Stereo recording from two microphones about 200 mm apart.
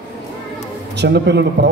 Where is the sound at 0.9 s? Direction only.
60° right (ahead or behind).